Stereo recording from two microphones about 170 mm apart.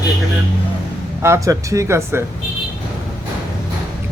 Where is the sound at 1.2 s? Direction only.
15° right (ahead or behind).